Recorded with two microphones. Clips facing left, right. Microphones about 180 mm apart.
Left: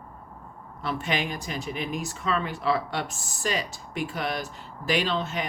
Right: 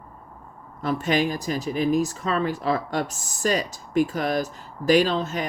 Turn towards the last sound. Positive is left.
turn(degrees=-40)  # may be behind; listen again after turning